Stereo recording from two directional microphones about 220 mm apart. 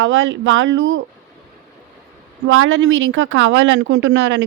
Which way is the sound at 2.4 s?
65° right (ahead or behind).